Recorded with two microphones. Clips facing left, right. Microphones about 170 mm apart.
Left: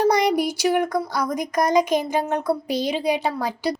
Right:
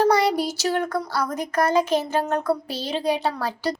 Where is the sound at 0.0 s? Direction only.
15° left (ahead or behind).